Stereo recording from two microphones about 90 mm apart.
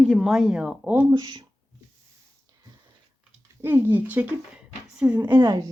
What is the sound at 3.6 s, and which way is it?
A woman's voice, 25° right (ahead or behind).